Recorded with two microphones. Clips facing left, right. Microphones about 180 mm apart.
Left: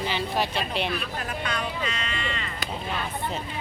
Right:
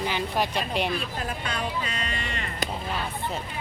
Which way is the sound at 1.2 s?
30° right (ahead or behind).